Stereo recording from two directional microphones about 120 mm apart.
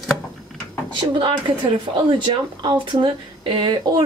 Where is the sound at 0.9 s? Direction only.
40° right (ahead or behind).